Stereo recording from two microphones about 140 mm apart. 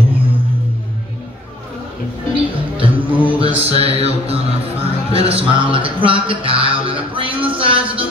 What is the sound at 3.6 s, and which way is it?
Music, 45° right (ahead or behind).